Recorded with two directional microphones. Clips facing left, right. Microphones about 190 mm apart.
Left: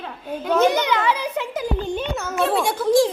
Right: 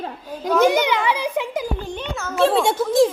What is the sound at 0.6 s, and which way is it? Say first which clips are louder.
A child's voice: right 2 dB; 15° right (ahead or behind).